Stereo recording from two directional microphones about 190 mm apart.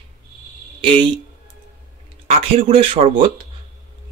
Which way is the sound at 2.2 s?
35° right (ahead or behind).